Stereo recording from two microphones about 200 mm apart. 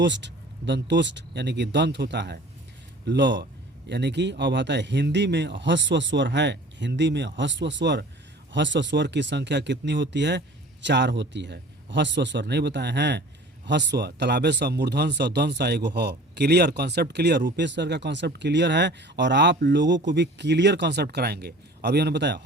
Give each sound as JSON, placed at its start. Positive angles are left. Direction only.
{"t": 0.0, "sound": "speech", "side_deg": -65}